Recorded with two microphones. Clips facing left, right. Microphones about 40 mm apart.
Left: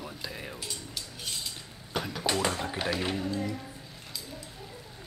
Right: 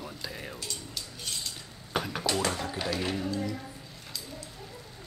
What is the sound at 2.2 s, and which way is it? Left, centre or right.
Speech, centre.